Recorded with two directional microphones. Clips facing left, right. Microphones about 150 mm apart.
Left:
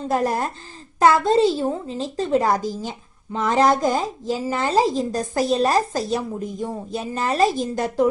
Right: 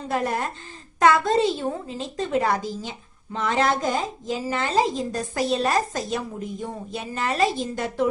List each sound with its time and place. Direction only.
0.1 s a woman's voice: 40° left (ahead or behind)